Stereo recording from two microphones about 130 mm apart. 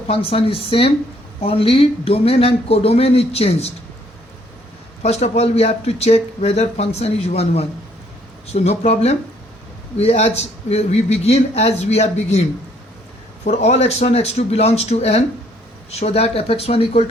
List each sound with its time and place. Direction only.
0.1 s speech: 45° left (ahead or behind)
5.0 s a man's voice: 55° left (ahead or behind)